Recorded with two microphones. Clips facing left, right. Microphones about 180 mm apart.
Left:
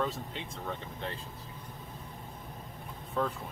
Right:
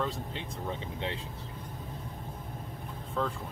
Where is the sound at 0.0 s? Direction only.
Centre (ahead or behind).